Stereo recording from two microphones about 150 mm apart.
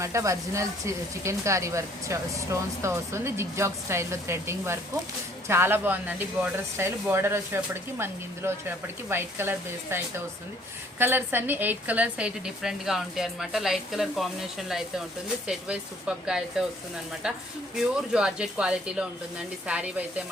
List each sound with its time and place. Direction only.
0.0 s a woman's voice: 20° right (ahead or behind)